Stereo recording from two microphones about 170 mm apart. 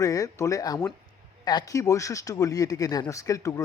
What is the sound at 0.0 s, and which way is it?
A man's voice, 20° left (ahead or behind).